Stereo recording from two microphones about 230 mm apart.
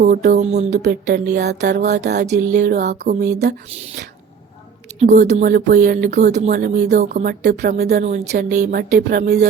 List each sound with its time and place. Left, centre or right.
0.0 s music: right
4.9 s music: right
7.6 s speech: right
8.0 s music: right